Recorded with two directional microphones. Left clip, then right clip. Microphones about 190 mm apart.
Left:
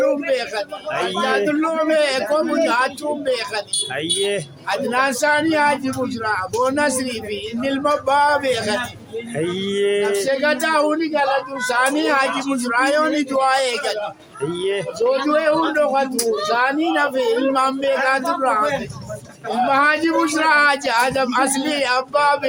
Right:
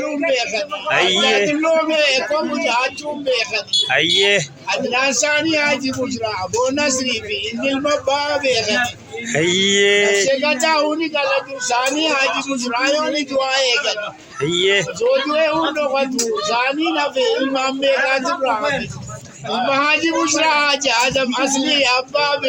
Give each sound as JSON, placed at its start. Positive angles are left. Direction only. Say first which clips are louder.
{"t": 0.3, "sound": "a man's voice", "louder": "right 3 dB", "side_deg": 25}
{"t": 0.9, "sound": "cattle", "louder": "right 8 dB", "side_deg": 0}
{"t": 1.5, "sound": "speech", "louder": "right 2 dB", "side_deg": 25}
{"t": 3.7, "sound": "cattle", "louder": "right 7 dB", "side_deg": 0}
{"t": 4.9, "sound": "speech", "louder": "even", "side_deg": 25}
{"t": 9.3, "sound": "cattle", "louder": "right 8 dB", "side_deg": 0}
{"t": 10.4, "sound": "speech", "louder": "right 1 dB", "side_deg": 25}
{"t": 14.4, "sound": "cattle", "louder": "right 6 dB", "side_deg": -5}
{"t": 15.3, "sound": "speech", "louder": "even", "side_deg": 20}
{"t": 19.7, "sound": "speech", "louder": "even", "side_deg": 25}